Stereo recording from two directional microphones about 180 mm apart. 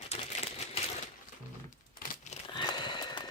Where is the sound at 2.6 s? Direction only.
25° left (ahead or behind).